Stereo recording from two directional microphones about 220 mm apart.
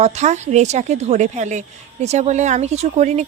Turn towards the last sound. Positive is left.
turn(degrees=-30)  # may be behind; listen again after turning